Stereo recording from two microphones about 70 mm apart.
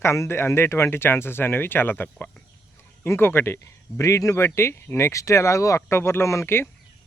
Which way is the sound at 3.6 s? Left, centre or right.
Left.